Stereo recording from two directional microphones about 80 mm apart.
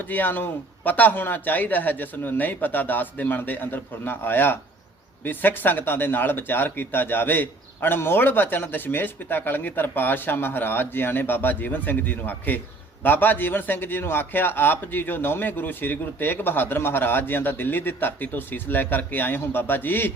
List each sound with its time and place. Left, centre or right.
0.0 s speech: left